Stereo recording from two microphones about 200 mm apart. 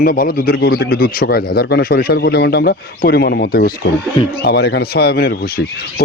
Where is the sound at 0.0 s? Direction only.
45° left (ahead or behind).